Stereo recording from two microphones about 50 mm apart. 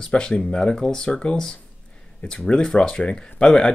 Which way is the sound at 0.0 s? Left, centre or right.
Centre.